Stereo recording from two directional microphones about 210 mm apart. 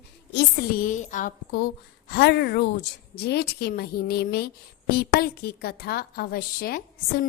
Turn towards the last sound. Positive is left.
turn(degrees=45)  # may be behind; listen again after turning